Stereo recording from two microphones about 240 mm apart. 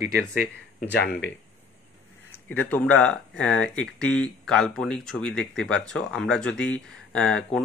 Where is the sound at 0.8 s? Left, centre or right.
Left.